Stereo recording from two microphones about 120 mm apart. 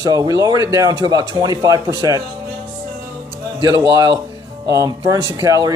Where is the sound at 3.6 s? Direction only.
35° right (ahead or behind).